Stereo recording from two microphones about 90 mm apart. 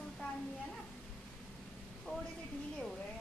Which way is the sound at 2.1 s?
10° left (ahead or behind).